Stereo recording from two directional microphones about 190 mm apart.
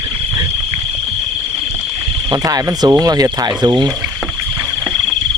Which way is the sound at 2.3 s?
20° right (ahead or behind).